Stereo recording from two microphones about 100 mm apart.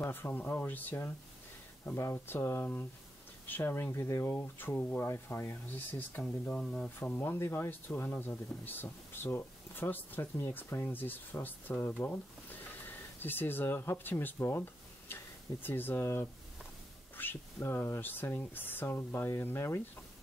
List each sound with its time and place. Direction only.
0.0 s speech: 20° left (ahead or behind)
6.2 s speech: 10° left (ahead or behind)
7.2 s speech: 25° left (ahead or behind)